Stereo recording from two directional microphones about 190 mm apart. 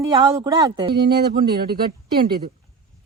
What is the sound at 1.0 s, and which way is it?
Speech, 55° right (ahead or behind).